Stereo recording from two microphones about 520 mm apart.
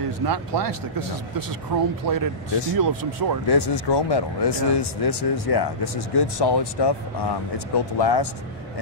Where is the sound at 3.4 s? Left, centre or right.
Left.